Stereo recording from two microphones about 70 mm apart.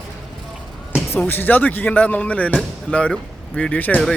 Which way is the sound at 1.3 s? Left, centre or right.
Left.